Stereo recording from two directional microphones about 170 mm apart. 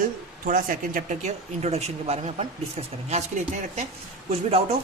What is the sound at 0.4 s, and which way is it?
Speech, 50° right (ahead or behind).